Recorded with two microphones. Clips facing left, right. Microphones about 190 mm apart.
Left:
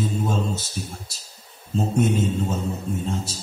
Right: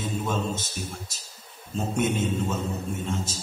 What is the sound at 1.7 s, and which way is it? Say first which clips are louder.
Speech: left 5 dB; 35° left (ahead or behind).